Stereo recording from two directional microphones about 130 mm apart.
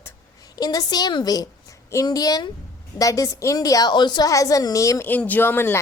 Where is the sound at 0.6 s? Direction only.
30° left (ahead or behind).